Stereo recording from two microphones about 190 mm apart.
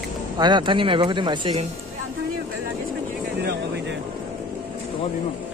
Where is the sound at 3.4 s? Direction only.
65° right (ahead or behind).